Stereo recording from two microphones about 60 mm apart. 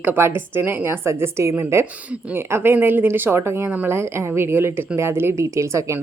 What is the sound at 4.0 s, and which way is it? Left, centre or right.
A woman's voice, right.